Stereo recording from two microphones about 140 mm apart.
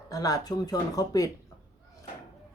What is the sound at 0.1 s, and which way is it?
Speech, 25° left (ahead or behind).